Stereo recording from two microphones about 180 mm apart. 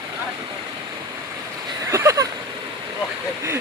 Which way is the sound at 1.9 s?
15° right (ahead or behind).